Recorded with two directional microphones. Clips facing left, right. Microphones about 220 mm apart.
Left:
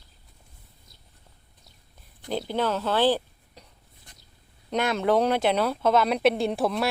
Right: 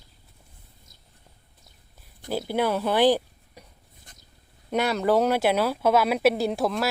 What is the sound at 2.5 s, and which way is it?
Speech, 10° right (ahead or behind).